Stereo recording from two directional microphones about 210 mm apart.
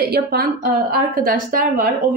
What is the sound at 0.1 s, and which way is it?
A woman's voice, 50° right (ahead or behind).